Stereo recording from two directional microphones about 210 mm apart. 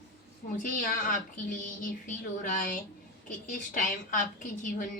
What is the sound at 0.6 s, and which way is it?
Speech, 40° left (ahead or behind).